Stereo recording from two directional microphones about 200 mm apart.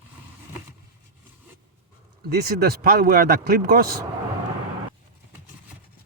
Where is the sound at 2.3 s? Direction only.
50° right (ahead or behind).